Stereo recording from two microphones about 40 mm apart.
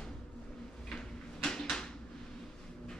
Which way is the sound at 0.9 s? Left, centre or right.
Centre.